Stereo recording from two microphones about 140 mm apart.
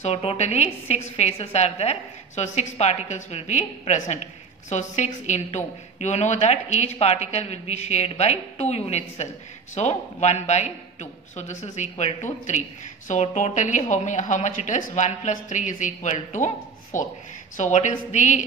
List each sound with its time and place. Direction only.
0.0 s a woman's voice: 45° left (ahead or behind); by 18.4 s 60° left (ahead or behind)